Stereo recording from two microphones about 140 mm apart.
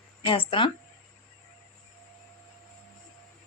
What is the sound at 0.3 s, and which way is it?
Speech, 35° left (ahead or behind).